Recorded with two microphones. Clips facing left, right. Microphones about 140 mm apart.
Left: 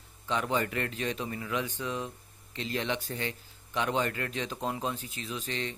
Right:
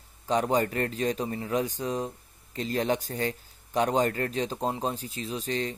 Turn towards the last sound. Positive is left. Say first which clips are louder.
# right 5 dB
turn(degrees=-40)  # may be behind; listen again after turning